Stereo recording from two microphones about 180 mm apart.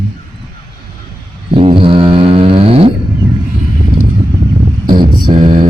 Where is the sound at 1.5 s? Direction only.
30° right (ahead or behind).